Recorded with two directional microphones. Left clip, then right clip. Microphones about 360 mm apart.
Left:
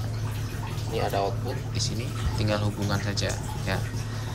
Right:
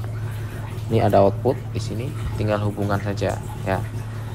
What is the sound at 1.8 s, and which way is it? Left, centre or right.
Speech, centre.